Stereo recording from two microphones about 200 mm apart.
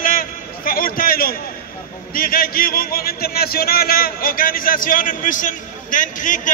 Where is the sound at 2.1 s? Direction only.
45° left (ahead or behind).